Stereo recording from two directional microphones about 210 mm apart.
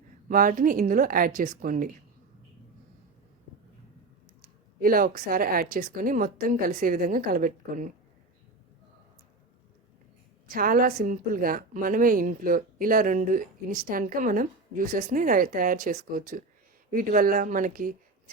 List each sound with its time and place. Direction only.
0.3 s a woman's voice: 40° right (ahead or behind)
4.8 s a woman's voice: 45° right (ahead or behind)
10.5 s a woman's voice: 45° right (ahead or behind)